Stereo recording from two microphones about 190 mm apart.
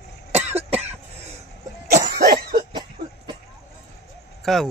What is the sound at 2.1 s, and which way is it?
Cough, 50° right (ahead or behind).